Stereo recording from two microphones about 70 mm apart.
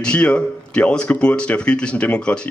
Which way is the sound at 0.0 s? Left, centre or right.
Centre.